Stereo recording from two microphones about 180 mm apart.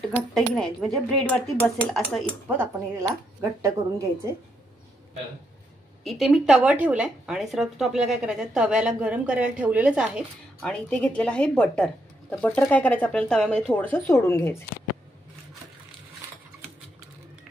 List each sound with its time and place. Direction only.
0.1 s speech: 5° left (ahead or behind)
2.4 s speech: 10° right (ahead or behind)
6.0 s speech: centre (ahead or behind)